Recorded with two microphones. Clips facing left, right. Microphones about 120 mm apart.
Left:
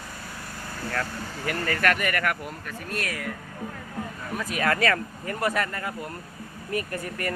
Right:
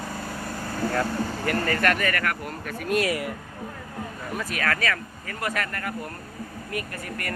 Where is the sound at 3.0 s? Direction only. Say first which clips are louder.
Right 7 dB; 10° right (ahead or behind).